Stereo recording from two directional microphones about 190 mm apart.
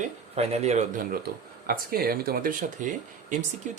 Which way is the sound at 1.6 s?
50° right (ahead or behind).